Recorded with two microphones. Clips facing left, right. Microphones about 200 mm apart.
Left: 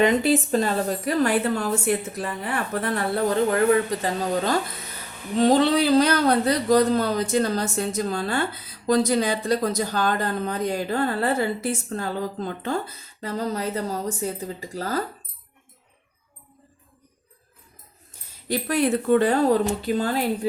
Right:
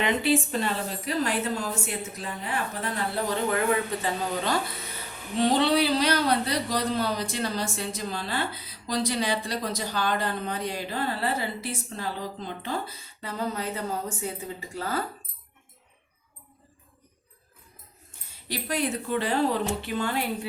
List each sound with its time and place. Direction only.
0.0 s speech: 40° left (ahead or behind); by 3.0 s 60° left (ahead or behind)
4.0 s a man's voice: 45° left (ahead or behind)
18.1 s a man's voice: 50° left (ahead or behind)